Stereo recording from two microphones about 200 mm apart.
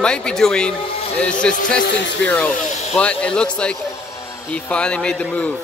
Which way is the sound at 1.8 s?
60° left (ahead or behind).